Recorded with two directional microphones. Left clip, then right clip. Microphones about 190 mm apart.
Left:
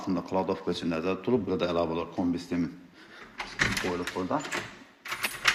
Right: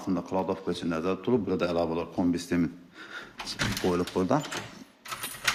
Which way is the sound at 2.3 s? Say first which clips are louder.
Right 3 dB; 30° right (ahead or behind).